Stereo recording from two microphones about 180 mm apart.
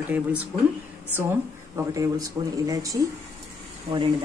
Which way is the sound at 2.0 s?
20° right (ahead or behind).